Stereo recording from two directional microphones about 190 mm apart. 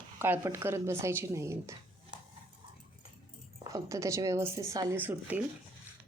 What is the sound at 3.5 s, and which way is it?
Speech, 15° right (ahead or behind).